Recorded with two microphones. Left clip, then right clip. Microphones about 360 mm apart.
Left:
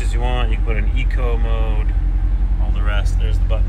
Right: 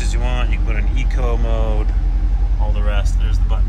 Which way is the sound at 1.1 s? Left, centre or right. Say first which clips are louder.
Right 3 dB; centre.